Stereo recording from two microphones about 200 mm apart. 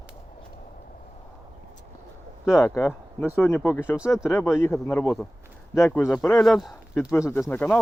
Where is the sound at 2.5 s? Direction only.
15° left (ahead or behind).